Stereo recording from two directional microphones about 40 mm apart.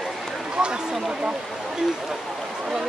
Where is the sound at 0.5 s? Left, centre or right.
Right.